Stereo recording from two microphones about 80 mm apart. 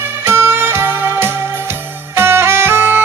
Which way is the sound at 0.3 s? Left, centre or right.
Right.